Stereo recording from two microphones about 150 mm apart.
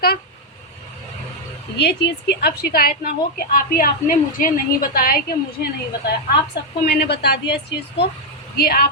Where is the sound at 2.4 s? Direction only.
90° left.